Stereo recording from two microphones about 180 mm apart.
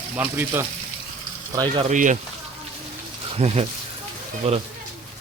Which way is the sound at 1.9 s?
45° right (ahead or behind).